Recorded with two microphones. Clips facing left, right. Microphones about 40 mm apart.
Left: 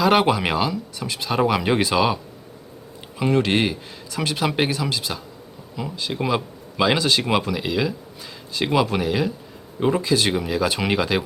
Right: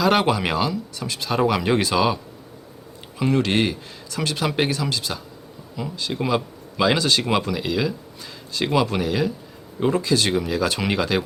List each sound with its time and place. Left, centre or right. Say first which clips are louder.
0.0 s a man's voice: left 1 dB; centre
3.2 s a man's voice: left 1 dB; centre